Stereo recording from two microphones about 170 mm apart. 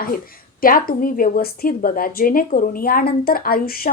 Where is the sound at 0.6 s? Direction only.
55° left (ahead or behind).